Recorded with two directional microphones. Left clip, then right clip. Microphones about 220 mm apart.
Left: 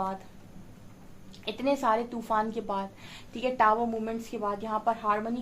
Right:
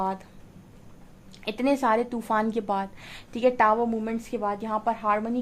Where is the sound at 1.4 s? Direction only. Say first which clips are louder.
Right 3 dB; 45° right (ahead or behind).